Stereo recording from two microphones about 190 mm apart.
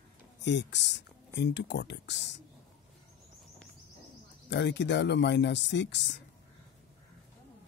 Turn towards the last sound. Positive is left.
turn(degrees=65)  # may be behind; listen again after turning